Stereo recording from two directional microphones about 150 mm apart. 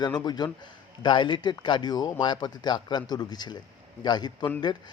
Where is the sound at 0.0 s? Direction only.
30° left (ahead or behind).